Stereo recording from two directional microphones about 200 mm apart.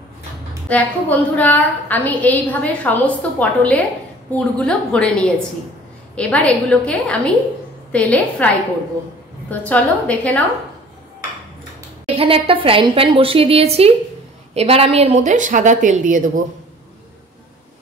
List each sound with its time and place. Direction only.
0.7 s a woman's voice: 10° left (ahead or behind)
9.5 s a woman's voice: 5° left (ahead or behind)
12.2 s a woman's voice: 25° right (ahead or behind)